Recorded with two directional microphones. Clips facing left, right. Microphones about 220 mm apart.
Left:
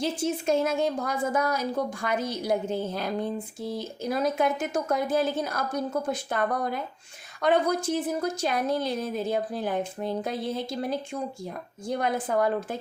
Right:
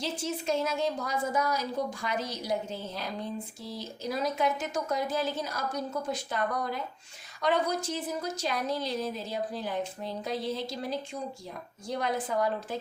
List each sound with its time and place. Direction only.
0.0 s a woman's voice: 50° left (ahead or behind)